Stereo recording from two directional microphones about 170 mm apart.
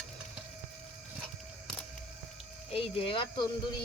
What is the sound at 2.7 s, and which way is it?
Speech, 30° left (ahead or behind).